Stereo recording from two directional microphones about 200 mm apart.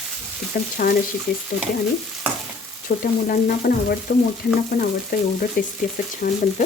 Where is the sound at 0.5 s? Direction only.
45° left (ahead or behind).